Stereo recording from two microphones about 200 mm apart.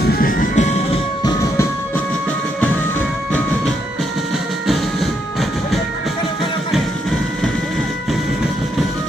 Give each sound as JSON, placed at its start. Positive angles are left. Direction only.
{"t": 0.0, "sound": "music", "side_deg": 45}